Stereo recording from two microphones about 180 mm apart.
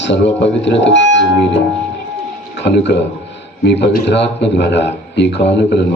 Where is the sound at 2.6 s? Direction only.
75° left (ahead or behind).